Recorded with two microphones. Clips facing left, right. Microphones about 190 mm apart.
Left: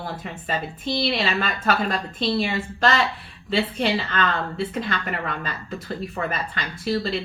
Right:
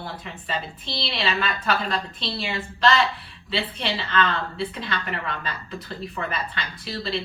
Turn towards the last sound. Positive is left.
turn(degrees=45)  # may be behind; listen again after turning